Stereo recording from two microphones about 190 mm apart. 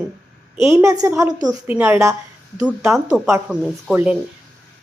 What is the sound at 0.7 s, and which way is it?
A woman's voice, 15° right (ahead or behind).